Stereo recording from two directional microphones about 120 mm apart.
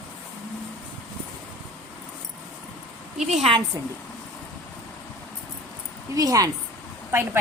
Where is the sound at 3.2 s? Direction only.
75° right (ahead or behind).